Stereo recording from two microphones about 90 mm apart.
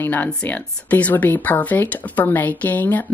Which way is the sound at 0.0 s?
20° left (ahead or behind).